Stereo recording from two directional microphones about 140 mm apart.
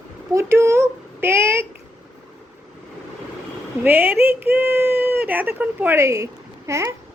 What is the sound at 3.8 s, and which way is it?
A child's voice, 15° right (ahead or behind).